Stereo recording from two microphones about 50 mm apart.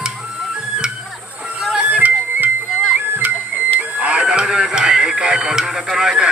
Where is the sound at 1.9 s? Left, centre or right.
Right.